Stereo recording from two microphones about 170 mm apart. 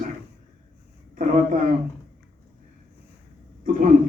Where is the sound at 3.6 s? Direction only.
50° right (ahead or behind).